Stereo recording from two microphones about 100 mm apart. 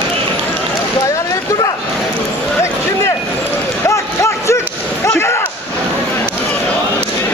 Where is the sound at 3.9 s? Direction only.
30° left (ahead or behind).